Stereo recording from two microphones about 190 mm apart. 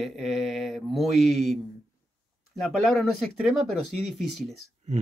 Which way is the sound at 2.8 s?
Centre (ahead or behind).